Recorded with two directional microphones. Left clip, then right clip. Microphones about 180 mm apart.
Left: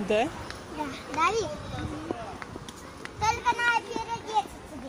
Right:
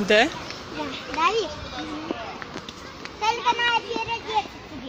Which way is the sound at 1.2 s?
20° left (ahead or behind).